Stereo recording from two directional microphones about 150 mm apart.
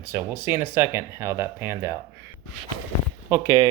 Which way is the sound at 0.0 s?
15° right (ahead or behind).